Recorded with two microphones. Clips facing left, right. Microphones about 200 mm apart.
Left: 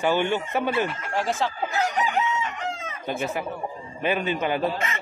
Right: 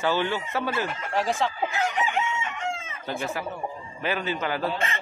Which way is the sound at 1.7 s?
40° left (ahead or behind).